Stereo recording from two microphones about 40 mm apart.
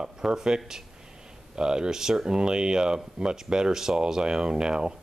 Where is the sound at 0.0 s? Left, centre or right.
Centre.